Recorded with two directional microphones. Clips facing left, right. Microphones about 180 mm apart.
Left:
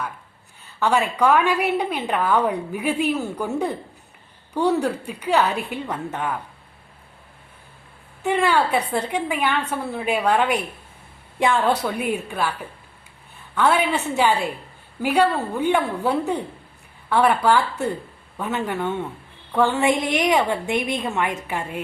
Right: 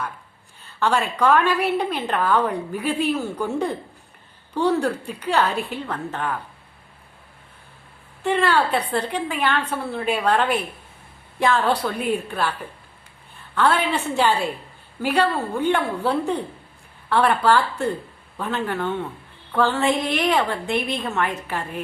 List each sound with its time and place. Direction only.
0.8 s a woman's voice: 10° left (ahead or behind)
8.2 s a woman's voice: 10° left (ahead or behind)
13.6 s a woman's voice: 10° left (ahead or behind)